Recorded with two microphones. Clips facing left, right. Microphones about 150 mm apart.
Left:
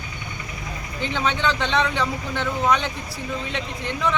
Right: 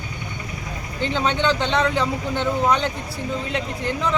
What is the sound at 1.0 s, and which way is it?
Speech, 35° right (ahead or behind).